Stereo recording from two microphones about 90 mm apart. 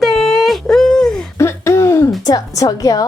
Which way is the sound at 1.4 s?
30° left (ahead or behind).